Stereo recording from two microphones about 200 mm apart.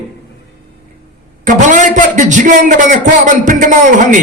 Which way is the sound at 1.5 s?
40° right (ahead or behind).